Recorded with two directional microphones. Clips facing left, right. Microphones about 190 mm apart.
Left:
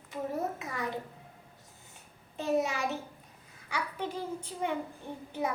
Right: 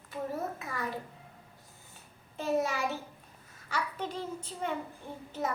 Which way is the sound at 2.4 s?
20° left (ahead or behind).